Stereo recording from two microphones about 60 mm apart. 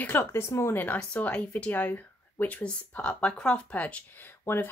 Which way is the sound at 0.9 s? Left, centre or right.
Left.